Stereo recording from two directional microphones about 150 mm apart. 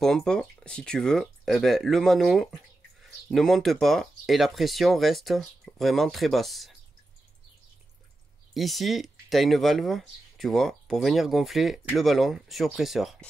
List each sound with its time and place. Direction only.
0.0 s speech: 5° left (ahead or behind)
8.5 s speech: centre (ahead or behind)